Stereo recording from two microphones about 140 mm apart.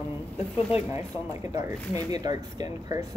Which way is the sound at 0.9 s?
20° right (ahead or behind).